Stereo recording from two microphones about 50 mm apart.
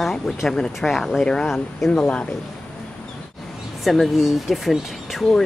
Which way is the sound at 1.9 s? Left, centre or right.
Left.